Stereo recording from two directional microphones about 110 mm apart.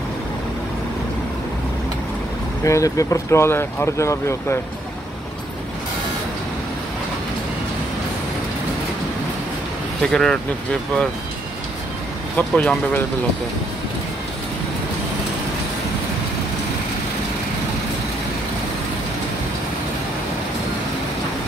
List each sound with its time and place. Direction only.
2.6 s speech: 30° left (ahead or behind)
10.0 s speech: 5° left (ahead or behind)
12.4 s speech: 10° left (ahead or behind)